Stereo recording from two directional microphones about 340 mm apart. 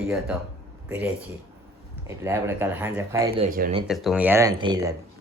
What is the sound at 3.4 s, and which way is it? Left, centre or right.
Speech, right.